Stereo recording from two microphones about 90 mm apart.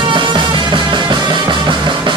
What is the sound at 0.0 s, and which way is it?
Music, 60° right (ahead or behind).